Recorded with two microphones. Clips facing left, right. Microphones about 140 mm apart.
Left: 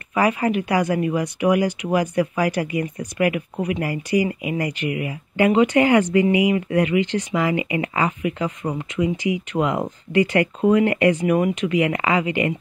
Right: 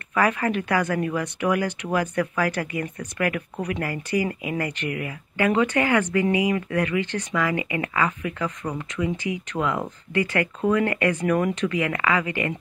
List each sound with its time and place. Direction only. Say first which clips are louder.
0.1 s speech: left 3 dB; 15° left (ahead or behind)